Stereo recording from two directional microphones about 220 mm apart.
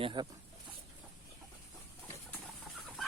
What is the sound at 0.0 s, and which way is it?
Speech, 20° right (ahead or behind).